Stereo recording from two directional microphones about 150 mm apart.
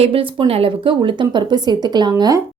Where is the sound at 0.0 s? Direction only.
40° right (ahead or behind).